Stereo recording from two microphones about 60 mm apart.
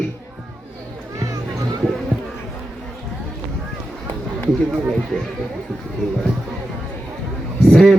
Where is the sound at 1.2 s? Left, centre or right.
Right.